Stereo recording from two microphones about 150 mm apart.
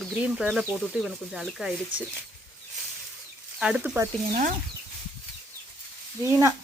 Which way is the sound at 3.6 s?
10° right (ahead or behind).